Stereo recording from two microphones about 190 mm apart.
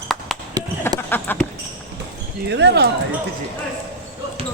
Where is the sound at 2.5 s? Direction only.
65° right (ahead or behind).